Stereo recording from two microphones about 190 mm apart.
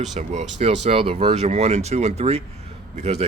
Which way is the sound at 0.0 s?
35° right (ahead or behind).